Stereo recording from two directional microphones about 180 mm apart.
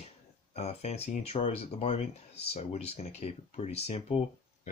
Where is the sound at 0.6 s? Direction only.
35° left (ahead or behind).